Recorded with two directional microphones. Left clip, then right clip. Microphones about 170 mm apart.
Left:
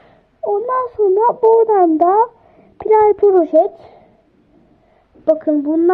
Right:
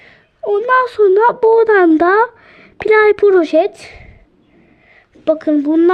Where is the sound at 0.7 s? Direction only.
55° right (ahead or behind).